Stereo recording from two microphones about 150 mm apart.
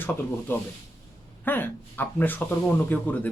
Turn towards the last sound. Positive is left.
turn(degrees=10)  # may be behind; listen again after turning